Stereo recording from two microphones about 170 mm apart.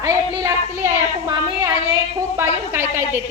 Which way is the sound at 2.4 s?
15° right (ahead or behind).